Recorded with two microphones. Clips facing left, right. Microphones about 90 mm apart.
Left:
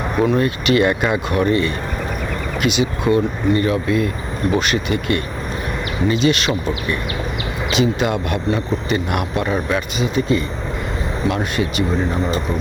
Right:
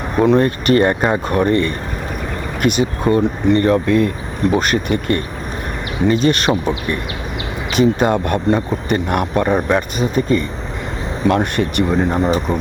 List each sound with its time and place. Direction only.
0.3 s speech: 45° right (ahead or behind)
3.1 s speech: centre (ahead or behind)
3.5 s speech: 55° right (ahead or behind)
7.8 s speech: 45° right (ahead or behind)